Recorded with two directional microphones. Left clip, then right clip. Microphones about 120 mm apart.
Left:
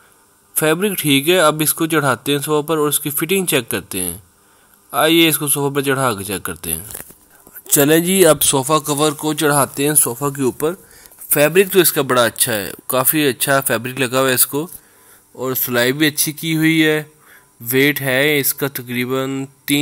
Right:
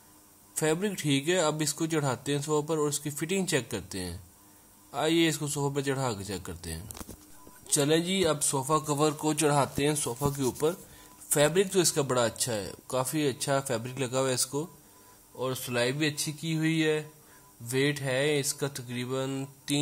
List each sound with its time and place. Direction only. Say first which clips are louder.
0.6 s speech: left 12 dB; 25° left (ahead or behind)
7.6 s speech: left 13 dB; 65° left (ahead or behind); by 8.4 s 80° left
8.4 s speech: left 12 dB; 50° left (ahead or behind)
8.8 s speech: left 10 dB; 30° left (ahead or behind)
9.6 s speech: left 10 dB; 45° left (ahead or behind)
10.2 s speech: left 9 dB; 25° left (ahead or behind)
11.7 s speech: left 13 dB; 25° left (ahead or behind)
15.3 s speech: left 12 dB; 50° left (ahead or behind)